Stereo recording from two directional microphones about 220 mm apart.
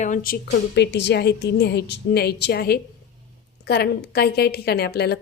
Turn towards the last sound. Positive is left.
turn(degrees=45)  # may be behind; listen again after turning